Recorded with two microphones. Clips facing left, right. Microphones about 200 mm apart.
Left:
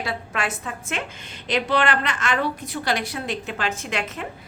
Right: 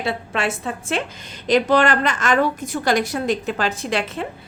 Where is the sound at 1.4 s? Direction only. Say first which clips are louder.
Right 6 dB; 40° right (ahead or behind).